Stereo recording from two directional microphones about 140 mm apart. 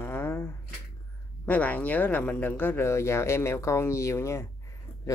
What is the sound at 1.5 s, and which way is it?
Speech, 10° left (ahead or behind).